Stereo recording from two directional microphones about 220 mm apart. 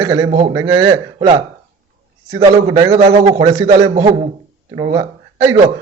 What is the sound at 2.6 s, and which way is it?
A man's voice, 15° right (ahead or behind).